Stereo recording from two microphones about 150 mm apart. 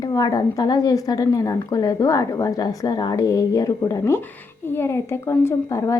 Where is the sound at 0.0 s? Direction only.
25° left (ahead or behind).